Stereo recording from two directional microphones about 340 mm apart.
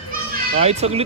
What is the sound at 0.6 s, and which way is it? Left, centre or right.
Speech, centre.